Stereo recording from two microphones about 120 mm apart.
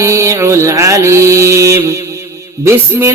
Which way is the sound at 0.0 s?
25° right (ahead or behind).